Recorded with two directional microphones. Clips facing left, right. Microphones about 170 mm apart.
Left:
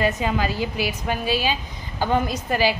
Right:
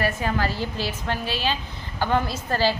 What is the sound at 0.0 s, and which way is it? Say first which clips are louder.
A woman's voice: left 2 dB; 20° left (ahead or behind).